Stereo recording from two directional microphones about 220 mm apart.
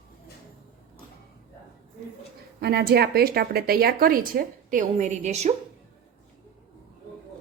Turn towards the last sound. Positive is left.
turn(degrees=-30)  # may be behind; listen again after turning